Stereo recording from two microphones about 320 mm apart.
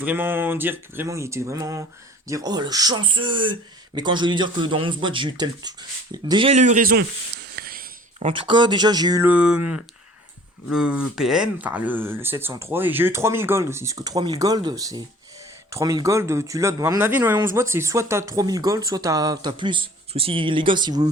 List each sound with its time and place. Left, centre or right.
0.0 s speech: centre; by 7.0 s right
7.5 s a sound: right
8.3 s speech: centre